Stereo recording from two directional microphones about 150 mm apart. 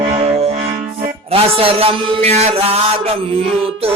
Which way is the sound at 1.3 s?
40° right (ahead or behind).